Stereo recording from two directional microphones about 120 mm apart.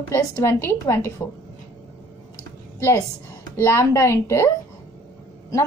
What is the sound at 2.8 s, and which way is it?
A woman's voice, 30° left (ahead or behind).